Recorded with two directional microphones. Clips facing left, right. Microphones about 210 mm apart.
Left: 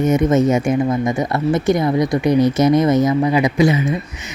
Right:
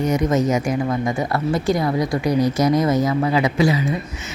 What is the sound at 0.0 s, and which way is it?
Speech, 25° left (ahead or behind).